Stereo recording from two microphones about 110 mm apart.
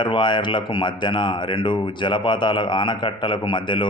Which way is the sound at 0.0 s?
45° left (ahead or behind).